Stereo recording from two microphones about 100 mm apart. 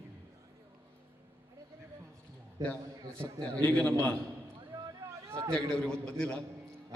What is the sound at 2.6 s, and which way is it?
Speech, 35° right (ahead or behind).